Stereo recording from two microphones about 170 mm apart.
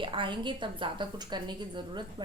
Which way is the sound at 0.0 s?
30° right (ahead or behind).